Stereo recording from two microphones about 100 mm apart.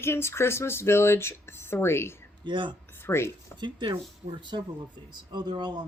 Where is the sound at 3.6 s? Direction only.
50° right (ahead or behind).